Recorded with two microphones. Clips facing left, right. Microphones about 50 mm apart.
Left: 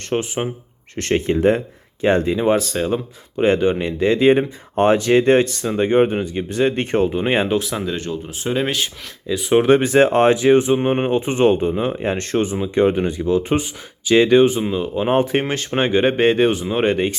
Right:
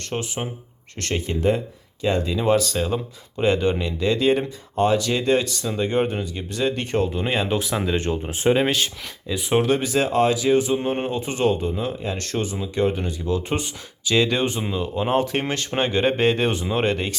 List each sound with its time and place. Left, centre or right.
0.1 s speech: left
1.1 s speech: left
7.4 s speech: centre
7.9 s speech: right
8.6 s speech: centre
9.6 s speech: left; by 14.4 s centre
14.4 s speech: centre